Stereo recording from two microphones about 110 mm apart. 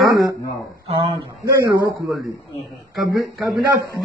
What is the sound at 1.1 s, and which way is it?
Speech, 30° right (ahead or behind).